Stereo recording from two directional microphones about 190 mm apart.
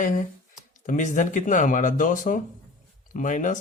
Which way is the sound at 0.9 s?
40° left (ahead or behind).